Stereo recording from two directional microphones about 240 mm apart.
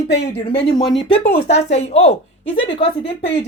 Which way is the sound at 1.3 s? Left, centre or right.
Left.